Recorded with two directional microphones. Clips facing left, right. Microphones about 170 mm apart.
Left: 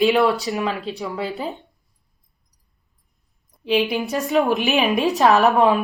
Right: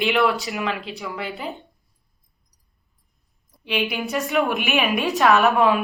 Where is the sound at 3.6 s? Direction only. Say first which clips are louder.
Left 5 dB; 35° left (ahead or behind).